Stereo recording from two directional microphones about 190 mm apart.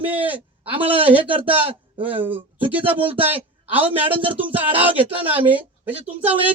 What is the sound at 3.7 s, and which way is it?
A man's voice, 10° right (ahead or behind).